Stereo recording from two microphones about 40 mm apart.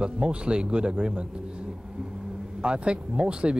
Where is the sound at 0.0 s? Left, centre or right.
Right.